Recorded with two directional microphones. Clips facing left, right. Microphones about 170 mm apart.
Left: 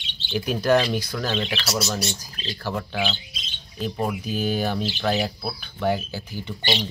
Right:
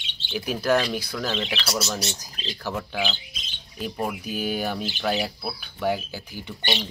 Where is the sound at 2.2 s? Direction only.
15° right (ahead or behind).